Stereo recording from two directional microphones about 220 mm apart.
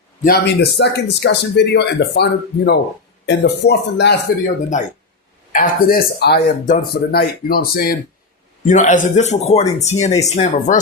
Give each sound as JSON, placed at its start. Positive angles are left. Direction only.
{"t": 0.2, "sound": "speech", "side_deg": 45}
{"t": 4.7, "sound": "speech", "side_deg": 35}